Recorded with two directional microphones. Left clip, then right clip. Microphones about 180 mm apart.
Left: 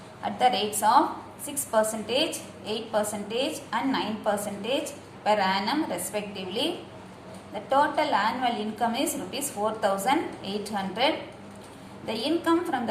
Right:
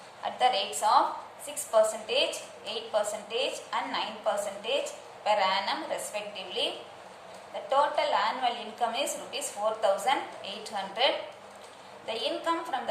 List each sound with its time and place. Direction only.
0.3 s a woman's voice: 25° left (ahead or behind)
7.7 s a woman's voice: 25° left (ahead or behind)